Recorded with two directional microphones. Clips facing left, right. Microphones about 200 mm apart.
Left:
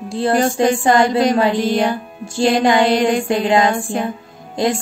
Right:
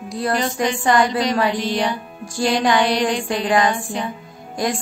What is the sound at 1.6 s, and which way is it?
Music, 50° left (ahead or behind).